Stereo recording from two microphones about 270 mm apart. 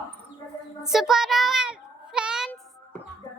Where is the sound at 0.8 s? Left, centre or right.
Centre.